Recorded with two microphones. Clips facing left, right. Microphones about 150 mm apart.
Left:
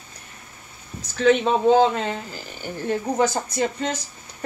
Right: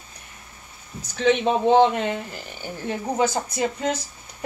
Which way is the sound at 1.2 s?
20° right (ahead or behind).